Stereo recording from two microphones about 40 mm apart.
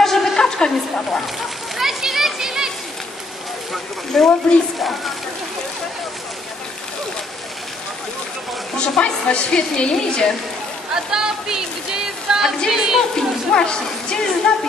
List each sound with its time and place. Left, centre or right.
0.0 s a sound: centre
0.4 s a woman's voice: centre
1.8 s children playing: centre
4.1 s a woman's voice: centre
8.7 s a woman's voice: left
11.1 s speech: centre
13.1 s a woman's voice: left